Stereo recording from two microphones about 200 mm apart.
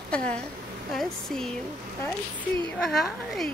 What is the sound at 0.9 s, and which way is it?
Speech, centre (ahead or behind).